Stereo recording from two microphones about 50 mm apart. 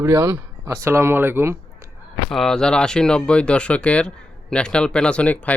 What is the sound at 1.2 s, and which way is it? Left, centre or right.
Speech, right.